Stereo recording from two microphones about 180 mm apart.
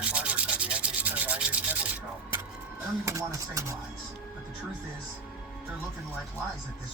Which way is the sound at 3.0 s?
15° right (ahead or behind).